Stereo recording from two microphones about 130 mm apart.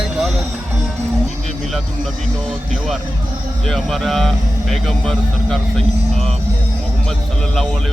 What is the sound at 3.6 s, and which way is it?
A man's voice, 5° left (ahead or behind).